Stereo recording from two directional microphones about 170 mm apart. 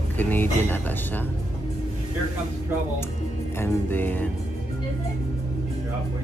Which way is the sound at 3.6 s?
10° left (ahead or behind).